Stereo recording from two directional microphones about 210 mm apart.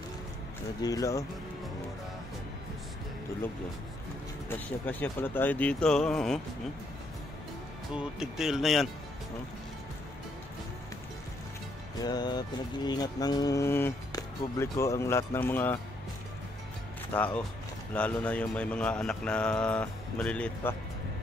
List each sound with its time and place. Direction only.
0.8 s mantra: 15° left (ahead or behind)
4.5 s mantra: 10° left (ahead or behind)
7.9 s speech: 5° right (ahead or behind)
12.0 s mantra: 20° left (ahead or behind)
17.1 s mantra: 5° left (ahead or behind)
17.9 s speech: 5° left (ahead or behind)